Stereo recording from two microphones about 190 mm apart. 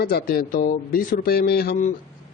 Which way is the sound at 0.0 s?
55° left (ahead or behind).